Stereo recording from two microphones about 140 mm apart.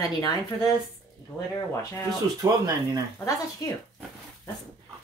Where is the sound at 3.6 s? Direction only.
25° left (ahead or behind).